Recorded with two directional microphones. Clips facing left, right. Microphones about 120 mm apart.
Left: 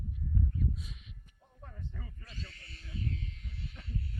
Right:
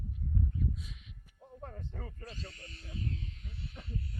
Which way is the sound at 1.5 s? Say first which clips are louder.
Right 4 dB; 45° right (ahead or behind).